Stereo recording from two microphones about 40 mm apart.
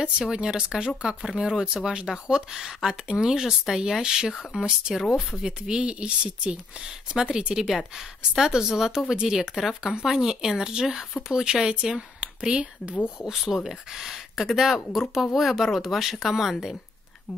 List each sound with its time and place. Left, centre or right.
0.3 s speech: centre
5.7 s speech: right
13.2 s speech: centre